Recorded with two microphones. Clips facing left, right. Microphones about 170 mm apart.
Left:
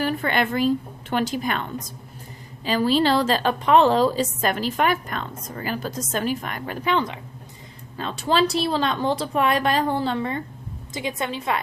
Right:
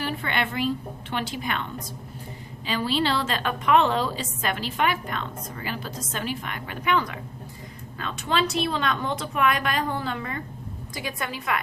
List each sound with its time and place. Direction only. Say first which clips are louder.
0.0 s a woman's voice: left 5 dB; 45° left (ahead or behind)
2.6 s a woman's voice: left 6 dB; 40° left (ahead or behind); by 11.6 s 25° left (ahead or behind)